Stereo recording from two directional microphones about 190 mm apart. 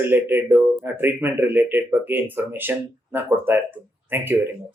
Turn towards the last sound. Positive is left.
turn(degrees=-10)  # may be behind; listen again after turning